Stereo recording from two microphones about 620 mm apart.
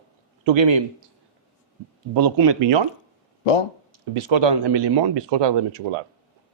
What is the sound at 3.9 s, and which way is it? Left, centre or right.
Speech, right.